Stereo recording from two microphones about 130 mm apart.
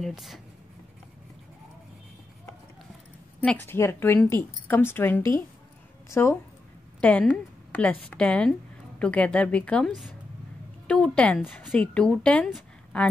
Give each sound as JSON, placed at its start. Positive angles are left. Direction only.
{"t": 0.0, "sound": "speech", "side_deg": 0}
{"t": 3.4, "sound": "a woman's voice", "side_deg": 15}